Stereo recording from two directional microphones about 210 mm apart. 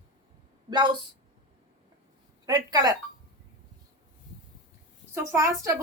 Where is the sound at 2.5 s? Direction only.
20° right (ahead or behind).